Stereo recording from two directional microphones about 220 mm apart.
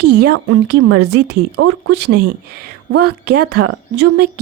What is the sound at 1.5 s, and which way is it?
Speech, 90° right.